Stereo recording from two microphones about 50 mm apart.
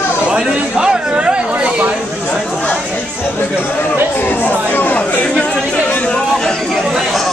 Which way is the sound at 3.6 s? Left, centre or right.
Left.